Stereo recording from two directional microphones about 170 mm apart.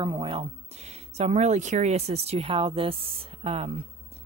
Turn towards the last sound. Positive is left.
turn(degrees=-35)  # may be behind; listen again after turning